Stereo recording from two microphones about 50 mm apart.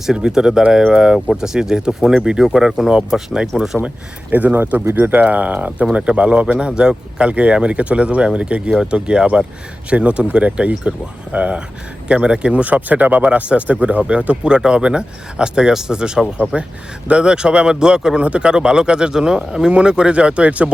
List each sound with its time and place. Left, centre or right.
0.2 s a man's voice: centre
3.8 s a man's voice: right